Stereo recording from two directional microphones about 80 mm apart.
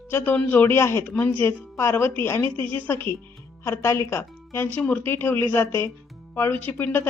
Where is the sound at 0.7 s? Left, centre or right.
Left.